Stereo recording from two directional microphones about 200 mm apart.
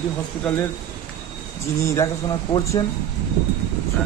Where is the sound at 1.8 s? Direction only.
15° left (ahead or behind).